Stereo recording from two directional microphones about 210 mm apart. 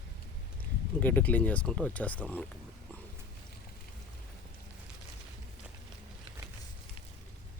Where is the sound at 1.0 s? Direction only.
10° left (ahead or behind).